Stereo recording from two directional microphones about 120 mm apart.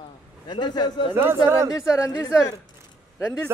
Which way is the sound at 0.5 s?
35° left (ahead or behind).